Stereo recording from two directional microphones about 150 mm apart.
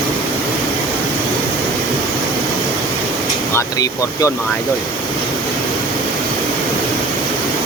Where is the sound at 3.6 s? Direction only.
25° left (ahead or behind).